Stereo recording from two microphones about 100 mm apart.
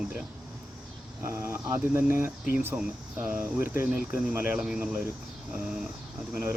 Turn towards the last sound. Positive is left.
turn(degrees=-15)  # may be behind; listen again after turning